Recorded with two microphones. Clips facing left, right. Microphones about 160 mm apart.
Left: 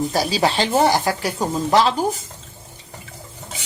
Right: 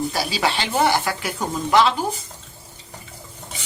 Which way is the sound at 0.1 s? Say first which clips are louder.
Left 4 dB; 40° left (ahead or behind).